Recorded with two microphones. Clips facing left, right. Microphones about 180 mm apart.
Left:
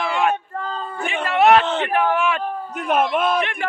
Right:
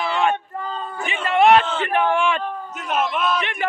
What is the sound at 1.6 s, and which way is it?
Speech, 65° left (ahead or behind).